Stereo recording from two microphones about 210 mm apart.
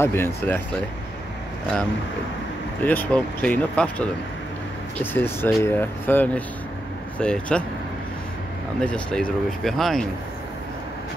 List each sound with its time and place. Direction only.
0.0 s speech: 10° left (ahead or behind)
2.8 s speech: 10° left (ahead or behind)
8.8 s speech: 5° left (ahead or behind)